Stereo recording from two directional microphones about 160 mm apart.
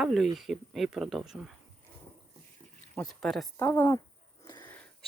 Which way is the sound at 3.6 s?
20° left (ahead or behind).